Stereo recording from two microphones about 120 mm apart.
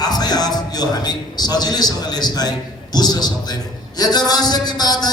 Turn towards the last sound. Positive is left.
turn(degrees=35)  # may be behind; listen again after turning